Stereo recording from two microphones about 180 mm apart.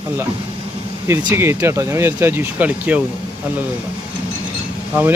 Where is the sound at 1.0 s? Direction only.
15° right (ahead or behind).